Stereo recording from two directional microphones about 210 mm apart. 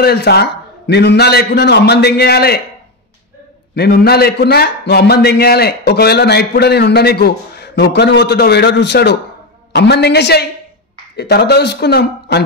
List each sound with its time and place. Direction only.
0.0 s a man's voice: 50° left (ahead or behind)
3.7 s a man's voice: 50° left (ahead or behind)